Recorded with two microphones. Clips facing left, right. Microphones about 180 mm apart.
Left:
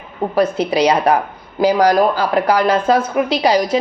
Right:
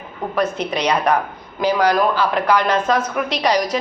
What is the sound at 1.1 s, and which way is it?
Speech, 30° left (ahead or behind).